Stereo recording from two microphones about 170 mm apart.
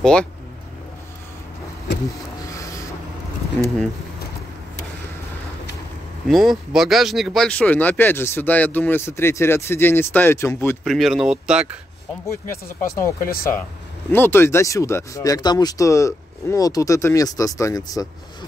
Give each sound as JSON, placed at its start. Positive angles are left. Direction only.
{"t": 0.0, "sound": "speech", "side_deg": 5}
{"t": 2.0, "sound": "a sound", "side_deg": 20}
{"t": 3.6, "sound": "speech", "side_deg": 10}
{"t": 6.2, "sound": "speech", "side_deg": 0}
{"t": 10.8, "sound": "speech", "side_deg": 0}
{"t": 12.9, "sound": "speech", "side_deg": 15}
{"t": 13.3, "sound": "speech", "side_deg": 60}
{"t": 14.1, "sound": "speech", "side_deg": 10}